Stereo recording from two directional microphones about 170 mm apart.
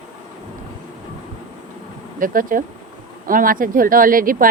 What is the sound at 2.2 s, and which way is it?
Speech, 55° right (ahead or behind).